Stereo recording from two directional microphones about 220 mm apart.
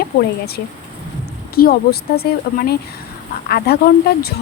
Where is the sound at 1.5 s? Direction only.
45° left (ahead or behind).